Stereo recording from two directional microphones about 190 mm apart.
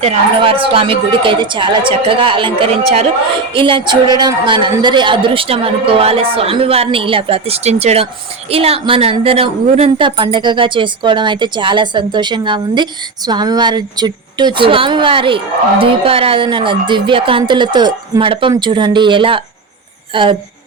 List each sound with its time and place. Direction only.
0.0 s speech: 30° right (ahead or behind)